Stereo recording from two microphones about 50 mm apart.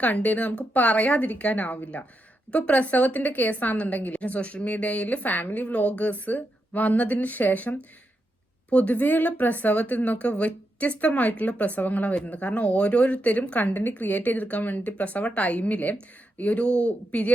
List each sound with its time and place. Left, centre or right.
0.0 s a woman's voice: left